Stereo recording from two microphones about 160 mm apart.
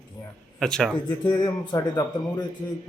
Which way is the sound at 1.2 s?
25° left (ahead or behind).